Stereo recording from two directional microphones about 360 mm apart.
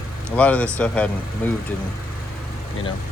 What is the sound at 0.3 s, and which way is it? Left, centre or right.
Speech, centre.